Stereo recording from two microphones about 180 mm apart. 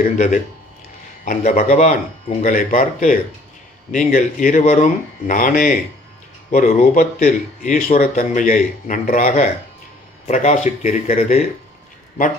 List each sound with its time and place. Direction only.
0.0 s speech: 45° left (ahead or behind)